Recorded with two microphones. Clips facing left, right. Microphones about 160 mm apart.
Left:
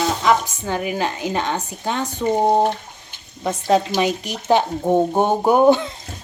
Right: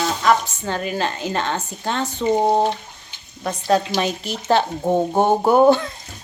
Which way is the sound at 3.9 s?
15° left (ahead or behind).